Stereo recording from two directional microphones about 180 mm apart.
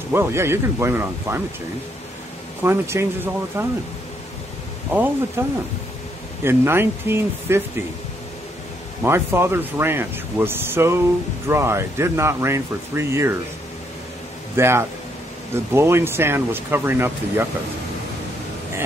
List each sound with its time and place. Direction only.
0.1 s speech: 15° right (ahead or behind)
2.6 s speech: 15° right (ahead or behind)
5.4 s speech: 15° right (ahead or behind)
9.0 s speech: 15° right (ahead or behind)
14.6 s speech: 15° right (ahead or behind)